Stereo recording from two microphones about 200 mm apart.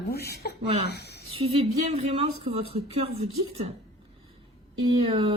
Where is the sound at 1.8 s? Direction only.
30° right (ahead or behind).